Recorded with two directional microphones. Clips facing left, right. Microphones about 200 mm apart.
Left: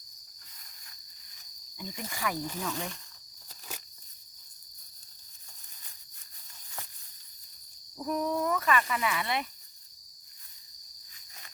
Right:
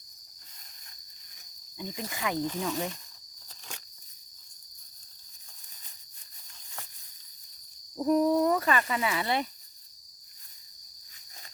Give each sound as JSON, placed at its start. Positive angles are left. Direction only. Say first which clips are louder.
{"t": 1.8, "sound": "speech", "louder": "right 2 dB", "side_deg": -20}
{"t": 7.9, "sound": "speech", "louder": "right 7 dB", "side_deg": -30}